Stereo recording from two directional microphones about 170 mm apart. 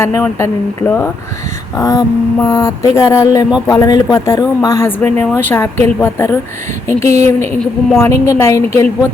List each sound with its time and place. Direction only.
0.2 s speech: 15° left (ahead or behind)
1.7 s a sound: 20° left (ahead or behind)
3.7 s speech: 20° left (ahead or behind)
7.1 s a woman's voice: 40° right (ahead or behind)
7.4 s a woman's voice: 5° left (ahead or behind)
8.0 s speech: 15° left (ahead or behind)